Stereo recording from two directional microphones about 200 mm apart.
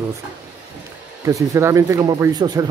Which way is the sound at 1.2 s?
15° right (ahead or behind).